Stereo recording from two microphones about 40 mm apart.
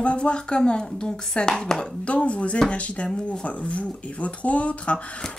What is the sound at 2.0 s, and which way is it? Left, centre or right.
Speech, left.